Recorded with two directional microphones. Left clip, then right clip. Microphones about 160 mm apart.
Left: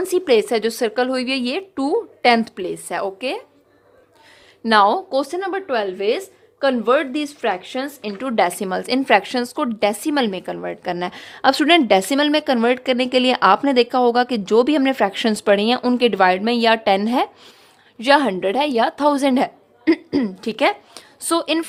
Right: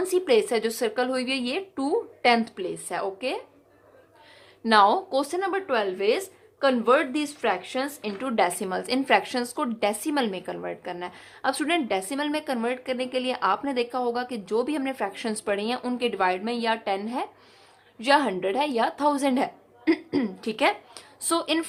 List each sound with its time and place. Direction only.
0.0 s a woman's voice: 45° left (ahead or behind)
4.6 s a woman's voice: 40° left (ahead or behind)